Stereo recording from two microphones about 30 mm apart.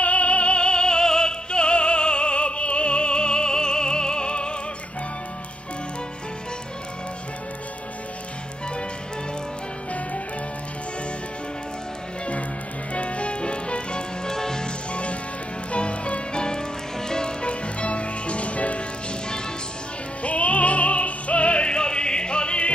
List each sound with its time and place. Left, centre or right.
0.0 s music: left
12.9 s music: left
14.2 s music: centre
14.9 s music: left
17.1 s music: left
20.2 s music: left